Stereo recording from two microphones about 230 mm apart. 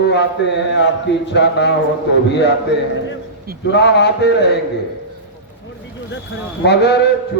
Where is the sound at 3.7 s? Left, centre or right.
Left.